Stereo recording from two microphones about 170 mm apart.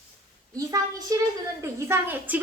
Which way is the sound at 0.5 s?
20° right (ahead or behind).